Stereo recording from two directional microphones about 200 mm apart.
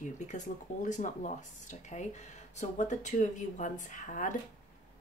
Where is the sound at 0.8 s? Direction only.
40° left (ahead or behind).